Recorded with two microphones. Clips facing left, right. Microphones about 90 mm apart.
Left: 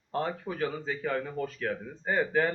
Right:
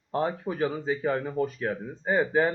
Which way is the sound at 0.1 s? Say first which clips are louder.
Right 4 dB; 20° right (ahead or behind).